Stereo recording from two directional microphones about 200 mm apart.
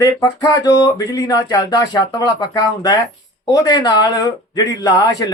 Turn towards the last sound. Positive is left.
turn(degrees=20)  # may be behind; listen again after turning